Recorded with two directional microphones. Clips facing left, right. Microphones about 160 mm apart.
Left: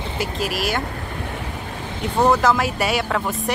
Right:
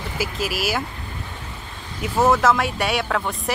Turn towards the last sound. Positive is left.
turn(degrees=0)  # may be behind; listen again after turning